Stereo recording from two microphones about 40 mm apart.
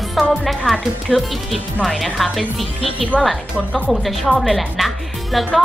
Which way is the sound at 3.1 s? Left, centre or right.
Left.